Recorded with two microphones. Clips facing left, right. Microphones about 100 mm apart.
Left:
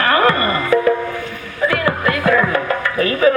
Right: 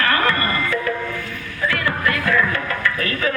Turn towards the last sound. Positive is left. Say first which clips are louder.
# left 7 dB
turn(degrees=25)  # may be behind; listen again after turning